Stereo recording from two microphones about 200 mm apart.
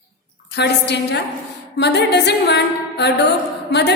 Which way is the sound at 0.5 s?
60° left (ahead or behind).